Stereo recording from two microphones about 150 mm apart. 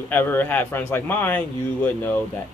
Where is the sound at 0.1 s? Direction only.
10° left (ahead or behind).